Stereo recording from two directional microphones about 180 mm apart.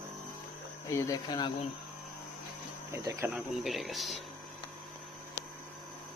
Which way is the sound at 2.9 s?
15° right (ahead or behind).